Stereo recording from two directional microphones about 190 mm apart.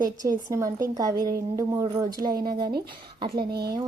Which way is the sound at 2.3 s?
55° right (ahead or behind).